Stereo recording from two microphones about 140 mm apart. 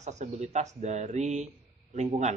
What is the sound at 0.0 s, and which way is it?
A man's voice, 55° right (ahead or behind).